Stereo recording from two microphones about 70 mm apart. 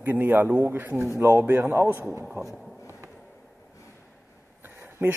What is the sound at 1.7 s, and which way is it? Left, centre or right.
Speech, right.